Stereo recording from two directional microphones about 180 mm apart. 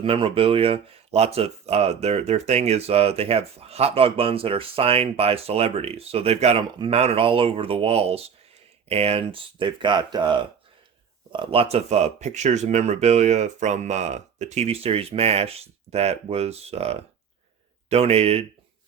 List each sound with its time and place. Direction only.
0.0 s speech: 30° right (ahead or behind)